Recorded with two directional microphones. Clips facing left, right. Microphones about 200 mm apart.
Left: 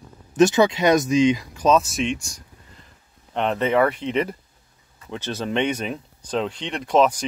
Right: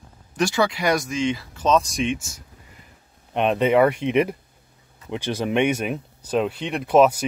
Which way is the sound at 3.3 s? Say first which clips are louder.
Right 2 dB; 15° right (ahead or behind).